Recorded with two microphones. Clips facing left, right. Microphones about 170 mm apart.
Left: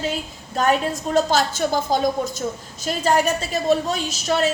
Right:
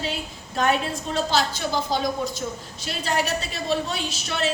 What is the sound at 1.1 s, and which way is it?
A woman's voice, 45° left (ahead or behind).